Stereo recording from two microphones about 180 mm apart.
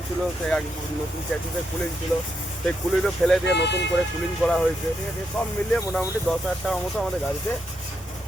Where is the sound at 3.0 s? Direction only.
Centre (ahead or behind).